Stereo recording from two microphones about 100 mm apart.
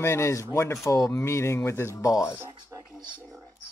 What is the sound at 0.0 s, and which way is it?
Speech, 25° left (ahead or behind).